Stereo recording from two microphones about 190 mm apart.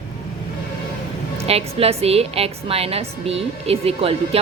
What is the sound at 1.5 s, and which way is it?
A woman's voice, 30° right (ahead or behind).